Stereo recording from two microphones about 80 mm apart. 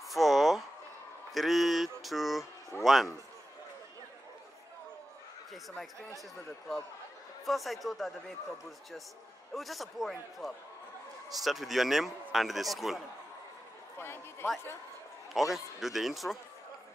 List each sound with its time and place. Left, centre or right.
0.1 s a sound: centre
1.3 s a man's voice: centre
7.4 s a man's voice: centre
13.9 s speech: left
15.5 s a man's voice: centre